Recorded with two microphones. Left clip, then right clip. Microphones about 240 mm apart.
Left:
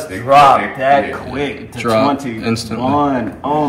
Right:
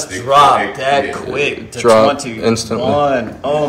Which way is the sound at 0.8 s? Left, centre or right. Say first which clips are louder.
Left 2 dB; centre.